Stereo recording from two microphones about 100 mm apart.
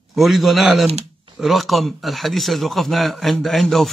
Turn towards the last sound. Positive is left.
turn(degrees=0)  # may be behind; listen again after turning